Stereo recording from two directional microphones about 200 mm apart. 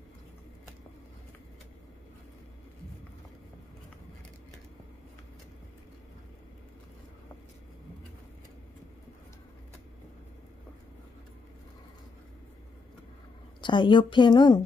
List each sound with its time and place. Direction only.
13.6 s a woman's voice: 25° left (ahead or behind)